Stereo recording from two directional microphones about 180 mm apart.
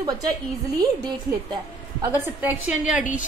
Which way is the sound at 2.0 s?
10° right (ahead or behind).